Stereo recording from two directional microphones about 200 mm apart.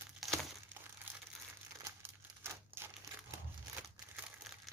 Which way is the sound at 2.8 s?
10° right (ahead or behind).